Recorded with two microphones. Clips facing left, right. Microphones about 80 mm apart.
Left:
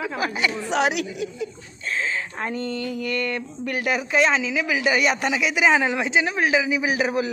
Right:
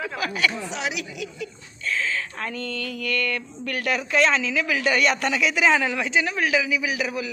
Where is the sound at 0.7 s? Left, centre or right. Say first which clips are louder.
Left 8 dB; left.